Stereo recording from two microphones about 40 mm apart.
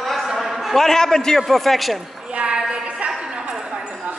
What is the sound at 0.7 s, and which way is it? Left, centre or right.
Speech, centre.